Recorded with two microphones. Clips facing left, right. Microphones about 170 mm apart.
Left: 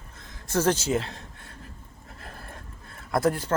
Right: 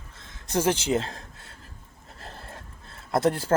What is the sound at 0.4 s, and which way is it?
Speech, 15° right (ahead or behind).